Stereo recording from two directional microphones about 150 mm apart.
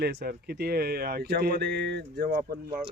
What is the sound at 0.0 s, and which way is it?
Speech, 90° right.